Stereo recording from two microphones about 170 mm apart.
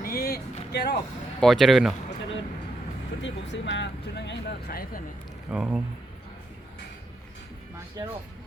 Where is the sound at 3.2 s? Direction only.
90° left; by 5.0 s 60° left (ahead or behind).